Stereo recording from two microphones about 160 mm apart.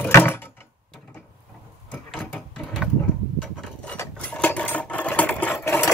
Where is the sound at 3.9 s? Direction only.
10° left (ahead or behind).